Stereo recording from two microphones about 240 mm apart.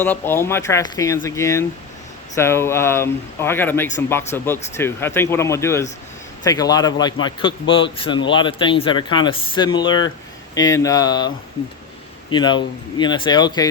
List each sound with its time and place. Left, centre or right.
0.0 s speech: centre
12.3 s speech: centre